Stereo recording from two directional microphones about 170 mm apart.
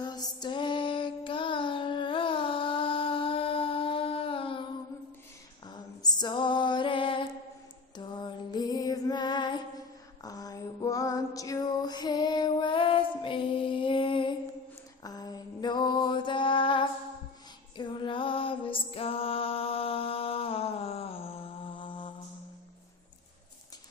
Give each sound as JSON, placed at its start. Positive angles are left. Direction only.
{"t": 0.0, "sound": "child singing", "side_deg": 25}
{"t": 6.0, "sound": "music", "side_deg": 25}
{"t": 10.2, "sound": "female singing", "side_deg": 20}
{"t": 15.0, "sound": "mantra", "side_deg": 20}
{"t": 17.7, "sound": "music", "side_deg": 25}